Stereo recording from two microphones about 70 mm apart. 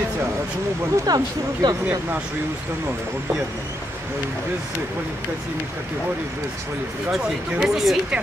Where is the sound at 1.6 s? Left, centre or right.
Right.